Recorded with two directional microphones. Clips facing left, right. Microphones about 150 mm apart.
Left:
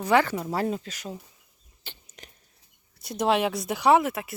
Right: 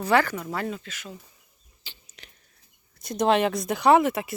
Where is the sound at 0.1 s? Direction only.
25° left (ahead or behind); by 1.2 s 40° left (ahead or behind).